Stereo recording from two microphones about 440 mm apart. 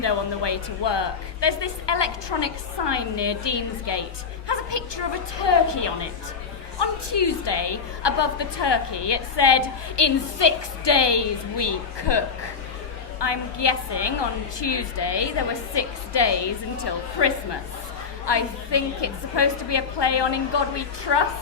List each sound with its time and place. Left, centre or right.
0.0 s a woman's voice: left